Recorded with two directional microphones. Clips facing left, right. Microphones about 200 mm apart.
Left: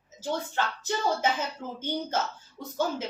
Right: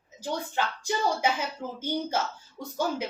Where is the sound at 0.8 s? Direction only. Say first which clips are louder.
Right 1 dB; 10° right (ahead or behind).